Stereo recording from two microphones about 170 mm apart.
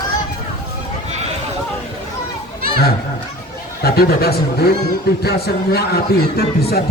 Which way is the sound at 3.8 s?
65° left (ahead or behind).